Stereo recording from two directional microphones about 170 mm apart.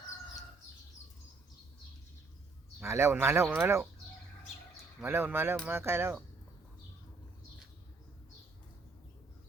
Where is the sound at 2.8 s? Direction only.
15° right (ahead or behind).